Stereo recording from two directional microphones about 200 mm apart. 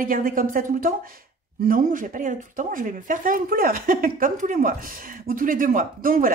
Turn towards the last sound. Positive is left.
turn(degrees=-45)  # may be behind; listen again after turning